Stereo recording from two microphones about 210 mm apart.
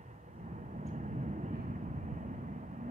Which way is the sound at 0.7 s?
35° right (ahead or behind).